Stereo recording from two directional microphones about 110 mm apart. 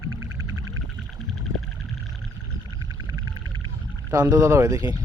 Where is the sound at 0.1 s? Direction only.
25° right (ahead or behind).